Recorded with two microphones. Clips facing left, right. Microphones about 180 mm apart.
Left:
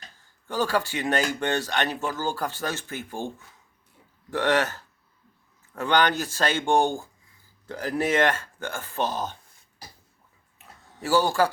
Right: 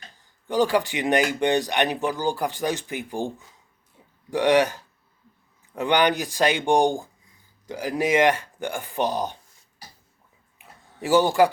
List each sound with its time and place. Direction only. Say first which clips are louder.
0.2 s speech: right 5 dB; 15° right (ahead or behind)
11.0 s speech: right 4 dB; 20° right (ahead or behind)